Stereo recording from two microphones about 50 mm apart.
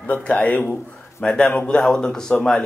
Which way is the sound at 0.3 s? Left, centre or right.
Left.